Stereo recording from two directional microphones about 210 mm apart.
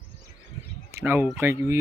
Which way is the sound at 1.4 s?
10° right (ahead or behind).